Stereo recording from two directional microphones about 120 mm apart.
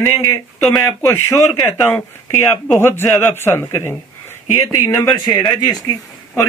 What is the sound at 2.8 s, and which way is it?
Speech, 20° left (ahead or behind).